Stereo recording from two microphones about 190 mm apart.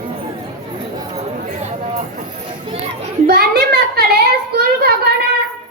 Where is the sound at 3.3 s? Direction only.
55° right (ahead or behind).